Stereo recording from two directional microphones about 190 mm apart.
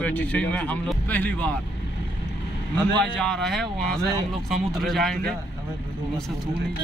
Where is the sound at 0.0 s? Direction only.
10° left (ahead or behind).